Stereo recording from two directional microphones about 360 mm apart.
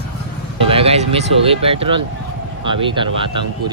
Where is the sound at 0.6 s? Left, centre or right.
Centre.